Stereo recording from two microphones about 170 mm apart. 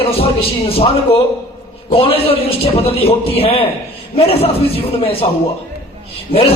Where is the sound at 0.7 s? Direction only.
35° left (ahead or behind).